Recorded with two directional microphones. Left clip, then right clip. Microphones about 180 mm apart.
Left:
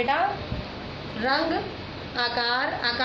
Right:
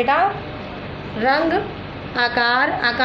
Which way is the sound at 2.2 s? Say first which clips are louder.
Right 8 dB; 50° right (ahead or behind).